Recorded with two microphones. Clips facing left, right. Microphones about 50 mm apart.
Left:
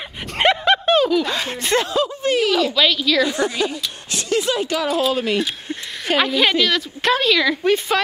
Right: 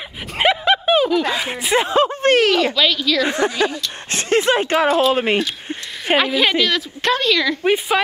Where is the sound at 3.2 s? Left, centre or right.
Right.